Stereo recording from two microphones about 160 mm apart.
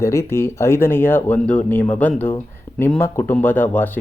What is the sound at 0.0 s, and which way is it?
Speech, 15° left (ahead or behind).